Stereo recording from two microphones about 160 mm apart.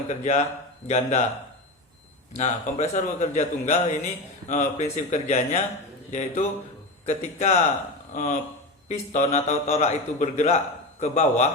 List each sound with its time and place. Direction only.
0.1 s a man's voice: 45° left (ahead or behind)
2.3 s a man's voice: 45° left (ahead or behind)